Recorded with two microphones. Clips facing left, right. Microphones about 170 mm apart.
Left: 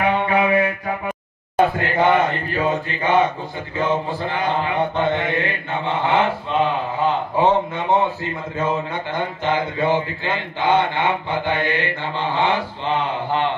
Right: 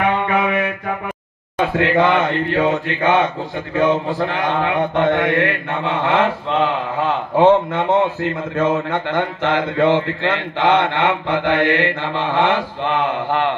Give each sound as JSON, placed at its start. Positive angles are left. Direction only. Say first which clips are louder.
{"t": 0.3, "sound": "music", "louder": "left 1 dB", "side_deg": -65}
{"t": 1.8, "sound": "a man's voice", "louder": "right 2 dB", "side_deg": -85}